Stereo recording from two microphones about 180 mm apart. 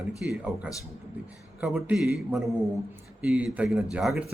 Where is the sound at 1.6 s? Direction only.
5° right (ahead or behind).